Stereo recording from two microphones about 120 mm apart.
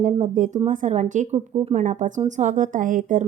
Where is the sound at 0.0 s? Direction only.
90° right.